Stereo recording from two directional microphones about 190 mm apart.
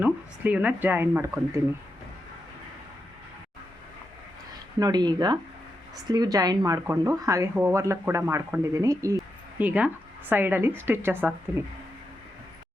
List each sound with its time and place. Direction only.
0.0 s speech: 10° right (ahead or behind)
4.8 s speech: 20° right (ahead or behind)